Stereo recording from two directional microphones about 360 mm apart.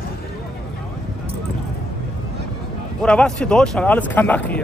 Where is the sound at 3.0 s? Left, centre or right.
Centre.